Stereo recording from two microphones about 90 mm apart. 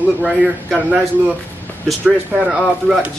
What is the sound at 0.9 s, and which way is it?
A man's voice, 15° right (ahead or behind).